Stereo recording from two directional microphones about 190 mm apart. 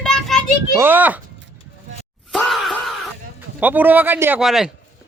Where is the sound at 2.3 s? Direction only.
Centre (ahead or behind).